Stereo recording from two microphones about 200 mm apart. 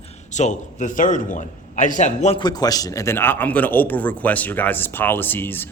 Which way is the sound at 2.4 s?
20° left (ahead or behind).